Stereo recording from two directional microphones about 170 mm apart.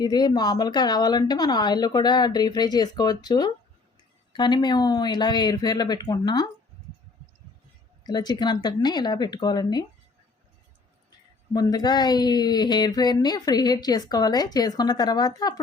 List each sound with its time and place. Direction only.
0.0 s speech: 25° left (ahead or behind)
8.0 s speech: 25° left (ahead or behind)
11.5 s speech: 25° left (ahead or behind)